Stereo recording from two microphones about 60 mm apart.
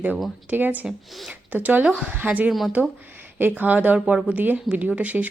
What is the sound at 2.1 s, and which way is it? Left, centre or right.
Speech, right.